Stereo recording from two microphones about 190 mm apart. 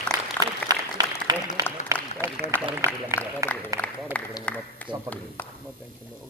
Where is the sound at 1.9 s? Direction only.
15° right (ahead or behind).